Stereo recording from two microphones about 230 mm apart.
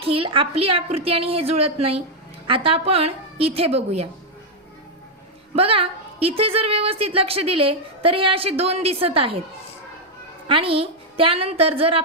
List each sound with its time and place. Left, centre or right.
0.0 s a woman's voice: right
5.5 s a woman's voice: right
10.5 s a woman's voice: right